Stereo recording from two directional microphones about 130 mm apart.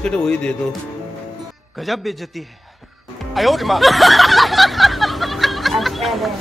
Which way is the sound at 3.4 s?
Centre (ahead or behind).